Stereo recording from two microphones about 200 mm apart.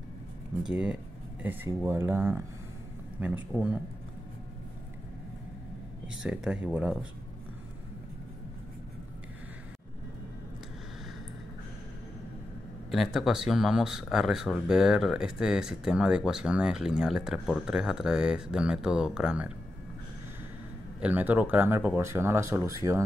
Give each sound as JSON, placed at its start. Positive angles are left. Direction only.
{"t": 0.7, "sound": "speech", "side_deg": -5}
{"t": 6.2, "sound": "speech", "side_deg": -5}
{"t": 12.9, "sound": "speech", "side_deg": 0}
{"t": 21.0, "sound": "speech", "side_deg": -10}